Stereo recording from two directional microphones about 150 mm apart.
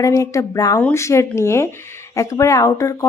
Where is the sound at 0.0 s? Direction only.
20° left (ahead or behind).